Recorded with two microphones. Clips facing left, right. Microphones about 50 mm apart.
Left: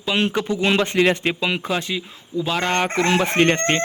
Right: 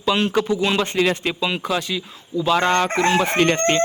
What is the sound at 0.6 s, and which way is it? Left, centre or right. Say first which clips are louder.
Speech: left 1 dB; left.